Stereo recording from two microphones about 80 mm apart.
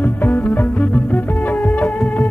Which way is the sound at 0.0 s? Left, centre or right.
Left.